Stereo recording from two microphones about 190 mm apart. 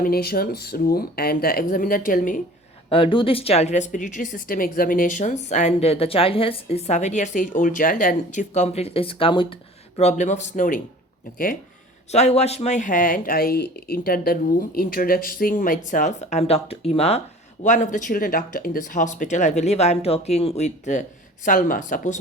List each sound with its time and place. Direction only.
0.0 s speech: 55° left (ahead or behind)
2.9 s speech: 25° left (ahead or behind)
12.1 s speech: 35° left (ahead or behind)